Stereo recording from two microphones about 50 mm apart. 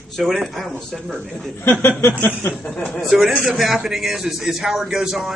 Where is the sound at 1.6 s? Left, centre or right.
Left.